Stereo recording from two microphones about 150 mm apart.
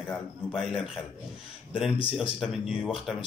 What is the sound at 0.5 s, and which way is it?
Speech, 5° right (ahead or behind).